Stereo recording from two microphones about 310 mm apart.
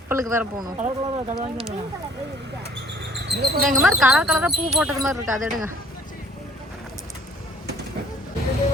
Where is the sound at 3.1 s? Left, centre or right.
Right.